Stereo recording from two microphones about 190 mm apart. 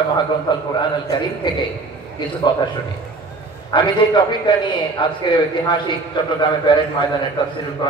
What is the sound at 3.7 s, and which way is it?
A man's voice, 25° left (ahead or behind).